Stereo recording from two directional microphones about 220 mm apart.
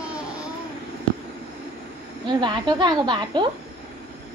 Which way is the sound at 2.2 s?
20° right (ahead or behind).